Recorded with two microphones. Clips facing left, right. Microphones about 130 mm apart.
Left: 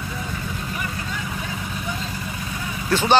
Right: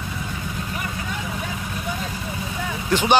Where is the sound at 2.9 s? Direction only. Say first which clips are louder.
Even; 15° right (ahead or behind).